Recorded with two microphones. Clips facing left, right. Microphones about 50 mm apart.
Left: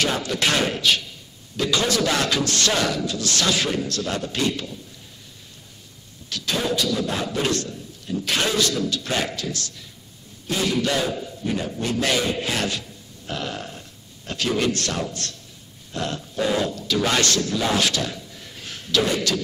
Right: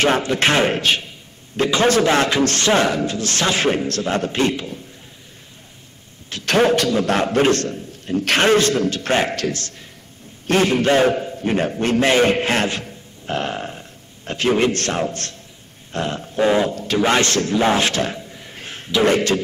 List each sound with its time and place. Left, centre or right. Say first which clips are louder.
0.0 s speech: right 6 dB; right
6.4 s a man's voice: right 8 dB; right
12.0 s a man's voice: right 8 dB; right